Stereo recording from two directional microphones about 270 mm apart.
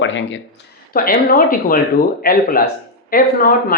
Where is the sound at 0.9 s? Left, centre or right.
Left.